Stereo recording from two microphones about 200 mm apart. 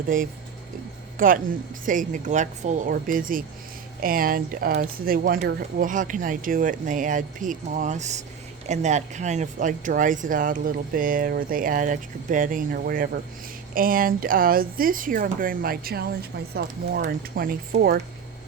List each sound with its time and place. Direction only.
1.2 s speech: 45° right (ahead or behind)